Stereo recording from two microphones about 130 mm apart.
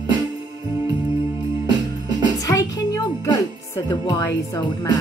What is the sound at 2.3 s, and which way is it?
Music, 25° left (ahead or behind).